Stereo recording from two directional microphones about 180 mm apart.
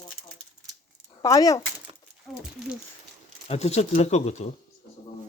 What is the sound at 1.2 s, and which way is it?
Speech, 20° left (ahead or behind).